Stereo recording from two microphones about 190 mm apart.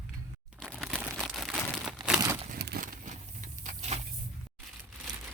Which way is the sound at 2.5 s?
55° right (ahead or behind).